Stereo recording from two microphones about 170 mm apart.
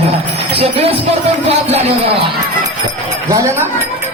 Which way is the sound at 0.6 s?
35° right (ahead or behind).